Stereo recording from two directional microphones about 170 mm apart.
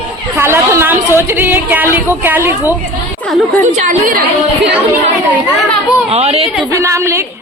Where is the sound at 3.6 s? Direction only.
45° right (ahead or behind).